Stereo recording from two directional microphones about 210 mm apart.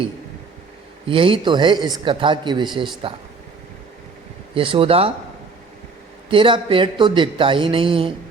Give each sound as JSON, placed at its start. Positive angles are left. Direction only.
{"t": 1.0, "sound": "speech", "side_deg": -25}
{"t": 4.5, "sound": "speech", "side_deg": -25}
{"t": 6.3, "sound": "speech", "side_deg": -25}